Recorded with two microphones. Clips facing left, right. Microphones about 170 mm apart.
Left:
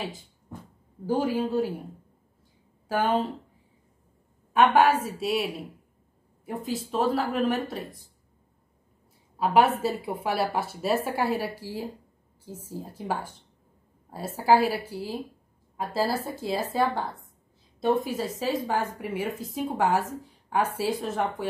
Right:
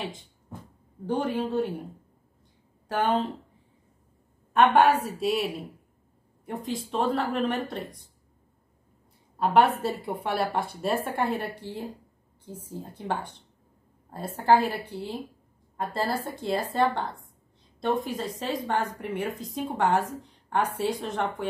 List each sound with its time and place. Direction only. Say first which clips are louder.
1.0 s speech: left 2 dB; 5° left (ahead or behind)
2.9 s speech: left 1 dB; centre (ahead or behind)
4.6 s speech: even; centre (ahead or behind)
9.4 s a woman's voice: even; centre (ahead or behind)